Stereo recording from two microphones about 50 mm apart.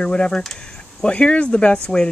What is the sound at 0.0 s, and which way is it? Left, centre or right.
Speech, centre.